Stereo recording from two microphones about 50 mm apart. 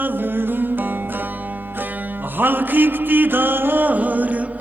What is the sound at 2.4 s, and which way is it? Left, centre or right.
Music, right.